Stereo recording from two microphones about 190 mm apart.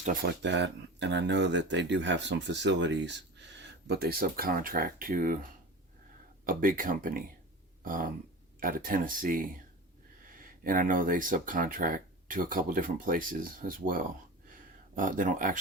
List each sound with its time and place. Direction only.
0.0 s speech: 50° right (ahead or behind)
6.4 s speech: 45° right (ahead or behind)